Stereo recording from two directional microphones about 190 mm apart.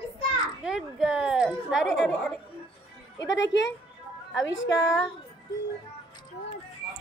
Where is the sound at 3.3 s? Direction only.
70° left (ahead or behind).